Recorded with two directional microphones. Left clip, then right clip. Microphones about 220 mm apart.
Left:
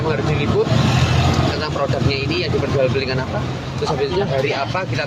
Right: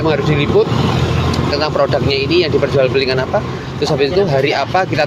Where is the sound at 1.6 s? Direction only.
40° right (ahead or behind).